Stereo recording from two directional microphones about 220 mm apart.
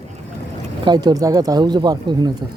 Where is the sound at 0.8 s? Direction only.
20° right (ahead or behind).